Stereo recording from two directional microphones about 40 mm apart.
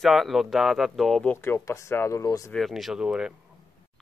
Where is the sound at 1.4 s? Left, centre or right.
Left.